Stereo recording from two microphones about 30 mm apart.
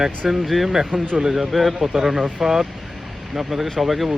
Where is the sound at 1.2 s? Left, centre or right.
Centre.